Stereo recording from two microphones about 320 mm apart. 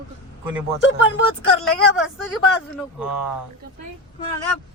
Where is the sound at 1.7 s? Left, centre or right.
Centre.